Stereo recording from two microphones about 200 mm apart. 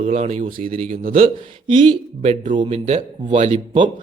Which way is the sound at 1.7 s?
25° right (ahead or behind).